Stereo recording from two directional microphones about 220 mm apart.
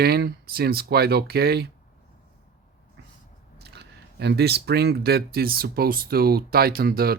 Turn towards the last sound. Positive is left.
turn(degrees=-45)  # may be behind; listen again after turning